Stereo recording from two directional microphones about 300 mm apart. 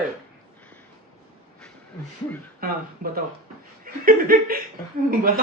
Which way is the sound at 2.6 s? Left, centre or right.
Right.